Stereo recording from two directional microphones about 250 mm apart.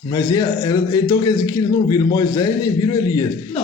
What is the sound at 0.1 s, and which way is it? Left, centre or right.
A man's voice, centre.